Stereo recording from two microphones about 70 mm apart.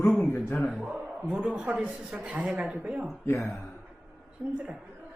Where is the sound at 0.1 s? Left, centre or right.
Centre.